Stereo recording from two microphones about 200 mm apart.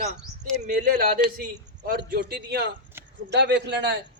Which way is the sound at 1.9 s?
50° right (ahead or behind).